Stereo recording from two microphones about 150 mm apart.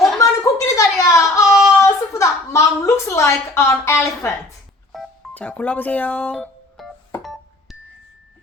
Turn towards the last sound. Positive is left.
turn(degrees=0)  # may be behind; listen again after turning